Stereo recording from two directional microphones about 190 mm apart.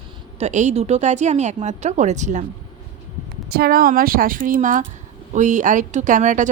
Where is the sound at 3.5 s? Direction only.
55° right (ahead or behind).